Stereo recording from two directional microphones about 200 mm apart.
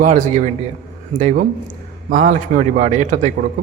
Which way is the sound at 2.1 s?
40° right (ahead or behind).